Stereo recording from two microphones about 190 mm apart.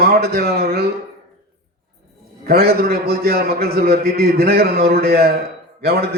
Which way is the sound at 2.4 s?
55° right (ahead or behind).